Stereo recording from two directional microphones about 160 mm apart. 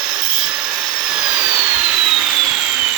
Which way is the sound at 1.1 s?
5° right (ahead or behind).